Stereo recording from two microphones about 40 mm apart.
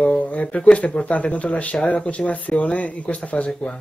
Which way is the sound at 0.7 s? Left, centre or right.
Left.